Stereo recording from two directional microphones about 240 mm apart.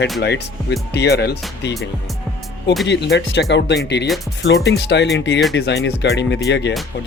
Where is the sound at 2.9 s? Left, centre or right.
Left.